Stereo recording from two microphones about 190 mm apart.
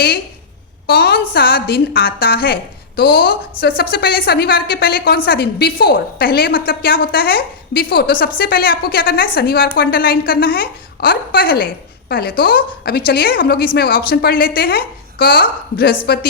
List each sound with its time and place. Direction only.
0.9 s a woman's voice: 55° left (ahead or behind)